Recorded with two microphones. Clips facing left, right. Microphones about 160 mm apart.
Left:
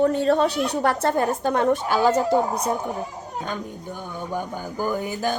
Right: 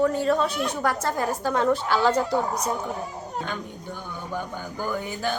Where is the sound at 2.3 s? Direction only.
30° left (ahead or behind).